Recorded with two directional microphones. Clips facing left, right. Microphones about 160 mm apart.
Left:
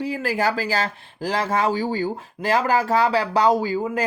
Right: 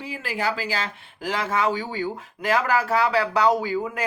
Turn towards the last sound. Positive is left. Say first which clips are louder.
# left 3 dB
turn(degrees=30)  # may be behind; listen again after turning